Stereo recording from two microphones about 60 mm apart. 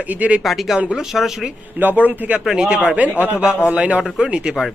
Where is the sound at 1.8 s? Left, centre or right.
Right.